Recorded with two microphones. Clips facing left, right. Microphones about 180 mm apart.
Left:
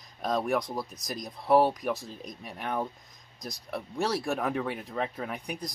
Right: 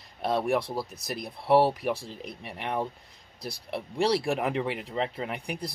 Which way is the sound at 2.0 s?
85° right.